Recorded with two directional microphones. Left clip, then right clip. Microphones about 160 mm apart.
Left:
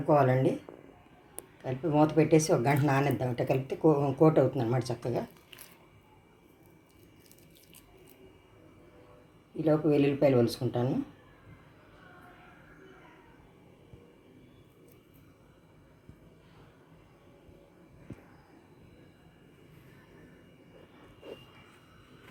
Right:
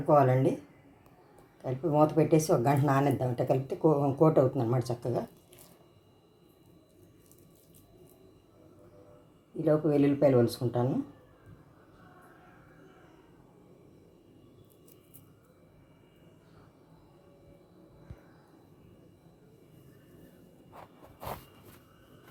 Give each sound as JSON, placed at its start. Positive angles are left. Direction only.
{"t": 0.1, "sound": "speech", "side_deg": -5}
{"t": 1.6, "sound": "speech", "side_deg": 0}
{"t": 9.6, "sound": "speech", "side_deg": 0}